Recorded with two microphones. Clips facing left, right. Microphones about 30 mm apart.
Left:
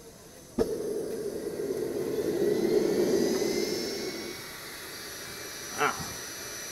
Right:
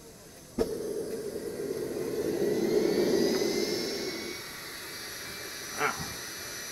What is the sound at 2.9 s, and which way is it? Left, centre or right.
Vehicle, centre.